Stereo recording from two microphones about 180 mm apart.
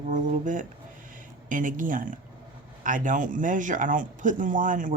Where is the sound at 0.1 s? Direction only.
45° right (ahead or behind).